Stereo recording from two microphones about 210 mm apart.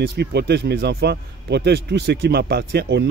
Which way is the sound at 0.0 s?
50° right (ahead or behind).